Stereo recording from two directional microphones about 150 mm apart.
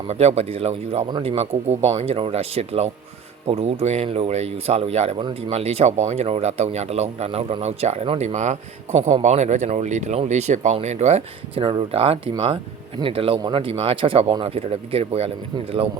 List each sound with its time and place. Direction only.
0.1 s speech: 45° right (ahead or behind)